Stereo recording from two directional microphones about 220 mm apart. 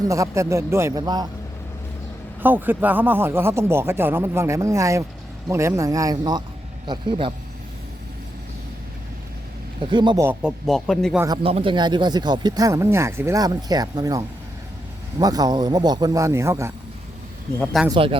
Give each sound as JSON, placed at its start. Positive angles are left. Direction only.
{"t": 0.1, "sound": "speech", "side_deg": -15}
{"t": 2.4, "sound": "speech", "side_deg": -10}
{"t": 9.8, "sound": "speech", "side_deg": -20}
{"t": 10.2, "sound": "speech", "side_deg": 0}
{"t": 11.4, "sound": "speech", "side_deg": -25}
{"t": 17.6, "sound": "speech", "side_deg": 5}
{"t": 17.8, "sound": "speech", "side_deg": -25}